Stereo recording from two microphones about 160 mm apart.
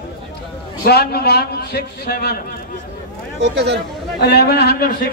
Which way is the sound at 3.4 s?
90° right.